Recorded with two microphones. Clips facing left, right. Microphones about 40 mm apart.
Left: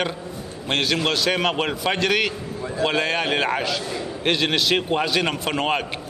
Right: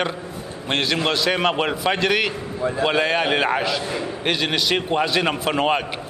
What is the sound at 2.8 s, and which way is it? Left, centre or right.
A man's voice, centre.